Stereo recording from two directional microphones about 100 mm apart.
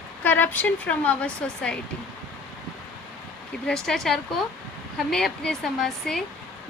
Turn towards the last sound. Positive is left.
turn(degrees=5)  # may be behind; listen again after turning